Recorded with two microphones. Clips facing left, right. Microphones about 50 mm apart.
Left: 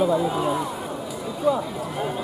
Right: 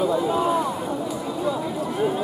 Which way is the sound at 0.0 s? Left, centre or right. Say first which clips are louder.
Even; centre.